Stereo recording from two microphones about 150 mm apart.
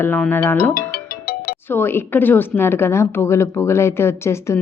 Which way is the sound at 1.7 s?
15° left (ahead or behind).